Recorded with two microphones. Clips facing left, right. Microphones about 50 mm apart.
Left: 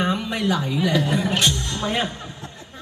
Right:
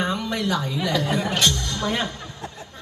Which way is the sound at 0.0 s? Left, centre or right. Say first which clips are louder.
Left 2 dB; centre.